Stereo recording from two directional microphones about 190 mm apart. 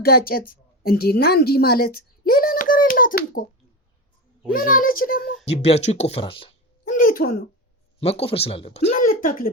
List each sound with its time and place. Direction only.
0.0 s a woman's voice: 50° left (ahead or behind)
4.5 s a child's voice: 45° left (ahead or behind)
5.6 s speech: 35° left (ahead or behind)
6.8 s a sound: 45° left (ahead or behind)
7.9 s speech: 30° left (ahead or behind); by 9.5 s 45° left (ahead or behind)